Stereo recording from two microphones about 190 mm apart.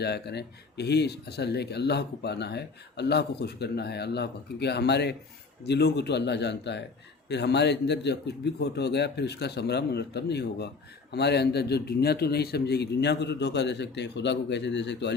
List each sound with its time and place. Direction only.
0.0 s speech: 60° left (ahead or behind)